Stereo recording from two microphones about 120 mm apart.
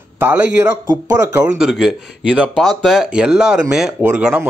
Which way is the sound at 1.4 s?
5° right (ahead or behind).